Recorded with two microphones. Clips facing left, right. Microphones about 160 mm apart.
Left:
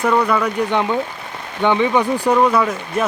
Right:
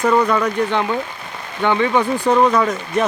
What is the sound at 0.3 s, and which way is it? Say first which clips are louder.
Speech: even; 10° left (ahead or behind).